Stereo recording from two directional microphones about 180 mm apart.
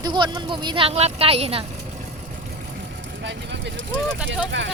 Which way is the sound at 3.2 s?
70° right (ahead or behind).